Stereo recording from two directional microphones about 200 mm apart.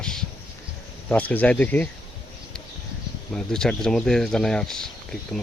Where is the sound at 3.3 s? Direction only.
5° left (ahead or behind).